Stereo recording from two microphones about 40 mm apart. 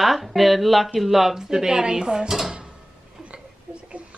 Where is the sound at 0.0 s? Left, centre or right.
Centre.